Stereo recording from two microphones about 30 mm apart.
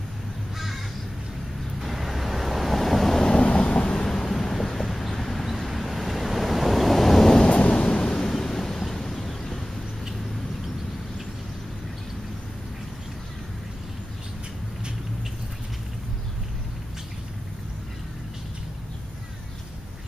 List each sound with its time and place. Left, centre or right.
1.8 s waves: centre
3.2 s vehicle: left
3.4 s vehicle: left; by 4.3 s centre
4.3 s vehicle: centre
5.7 s waves: centre
7.4 s thunder: left
8.2 s a sound: centre